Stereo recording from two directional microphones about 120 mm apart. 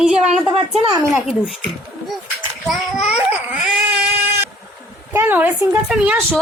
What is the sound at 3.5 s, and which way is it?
Dog, 10° right (ahead or behind).